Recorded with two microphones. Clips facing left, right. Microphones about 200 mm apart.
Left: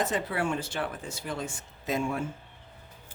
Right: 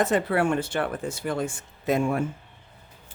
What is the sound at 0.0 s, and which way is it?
Speech, 60° right (ahead or behind).